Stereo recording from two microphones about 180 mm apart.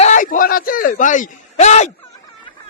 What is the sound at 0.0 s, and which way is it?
A man's voice, 45° left (ahead or behind).